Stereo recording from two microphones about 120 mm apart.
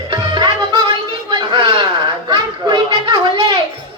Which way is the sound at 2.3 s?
40° right (ahead or behind).